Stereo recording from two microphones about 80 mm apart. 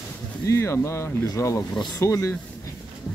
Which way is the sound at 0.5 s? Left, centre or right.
Left.